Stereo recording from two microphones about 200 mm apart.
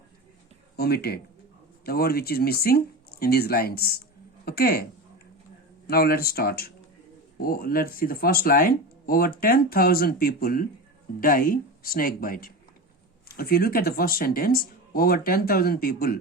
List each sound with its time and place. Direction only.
0.8 s speech: 50° left (ahead or behind)
5.9 s speech: 50° left (ahead or behind)